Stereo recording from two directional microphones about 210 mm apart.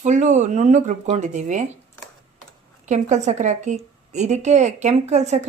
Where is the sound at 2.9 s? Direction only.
35° right (ahead or behind).